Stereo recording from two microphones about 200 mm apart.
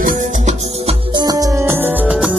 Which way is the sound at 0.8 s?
20° right (ahead or behind).